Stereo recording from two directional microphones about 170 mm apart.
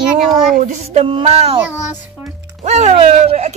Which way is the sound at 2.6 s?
40° right (ahead or behind).